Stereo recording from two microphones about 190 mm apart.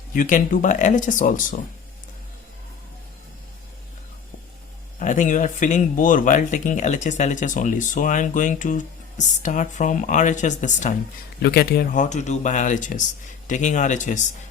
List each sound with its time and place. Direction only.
0.1 s speech: 45° left (ahead or behind)
4.9 s speech: 40° left (ahead or behind)
11.4 s speech: 55° left (ahead or behind)
12.0 s speech: 40° left (ahead or behind)